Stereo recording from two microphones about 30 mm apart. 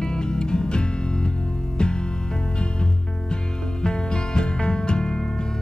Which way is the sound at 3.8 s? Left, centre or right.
Left.